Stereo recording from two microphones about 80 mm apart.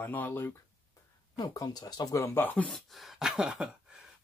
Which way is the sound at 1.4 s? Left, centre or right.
Left.